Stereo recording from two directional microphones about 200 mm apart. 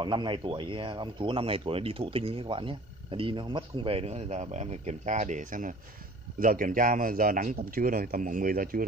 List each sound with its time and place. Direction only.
0.0 s speech: 25° right (ahead or behind); by 8.8 s 45° right (ahead or behind)